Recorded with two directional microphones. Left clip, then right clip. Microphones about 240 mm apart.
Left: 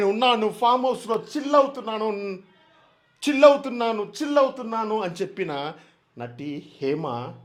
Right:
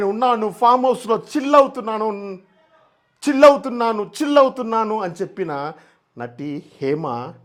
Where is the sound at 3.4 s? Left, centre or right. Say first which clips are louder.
Right 4 dB; right.